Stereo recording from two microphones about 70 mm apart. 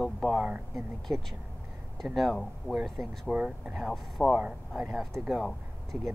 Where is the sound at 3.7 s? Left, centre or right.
Centre.